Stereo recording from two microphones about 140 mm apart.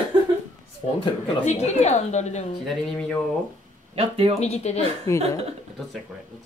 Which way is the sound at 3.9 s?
45° right (ahead or behind).